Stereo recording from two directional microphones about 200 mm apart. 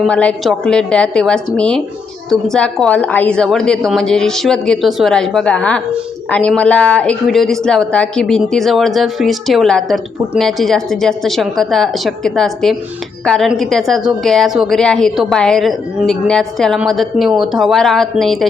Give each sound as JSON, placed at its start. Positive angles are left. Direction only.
{"t": 0.0, "sound": "speech", "side_deg": 5}